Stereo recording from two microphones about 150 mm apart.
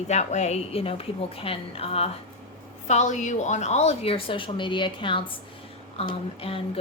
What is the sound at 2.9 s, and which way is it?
A woman's voice, 50° left (ahead or behind).